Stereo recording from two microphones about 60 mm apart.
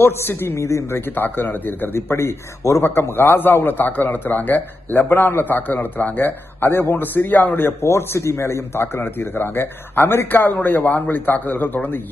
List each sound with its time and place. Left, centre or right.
0.0 s a man's voice: left
2.0 s speech: left
2.8 s a man's voice: left
7.9 s a man's voice: left